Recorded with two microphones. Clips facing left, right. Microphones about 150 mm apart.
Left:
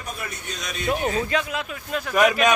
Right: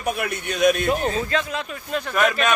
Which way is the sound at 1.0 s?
10° left (ahead or behind).